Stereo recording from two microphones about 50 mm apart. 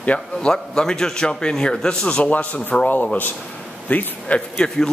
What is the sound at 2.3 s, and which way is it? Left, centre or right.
Speech, left.